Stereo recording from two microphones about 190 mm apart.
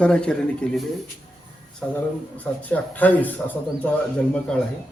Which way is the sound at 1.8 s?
5° left (ahead or behind).